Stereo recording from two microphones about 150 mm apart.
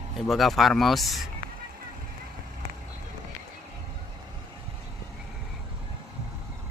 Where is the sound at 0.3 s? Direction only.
Centre (ahead or behind).